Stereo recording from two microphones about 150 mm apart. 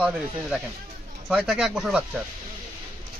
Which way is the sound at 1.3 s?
5° right (ahead or behind).